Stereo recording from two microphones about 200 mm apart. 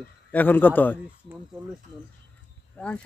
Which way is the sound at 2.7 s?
5° left (ahead or behind).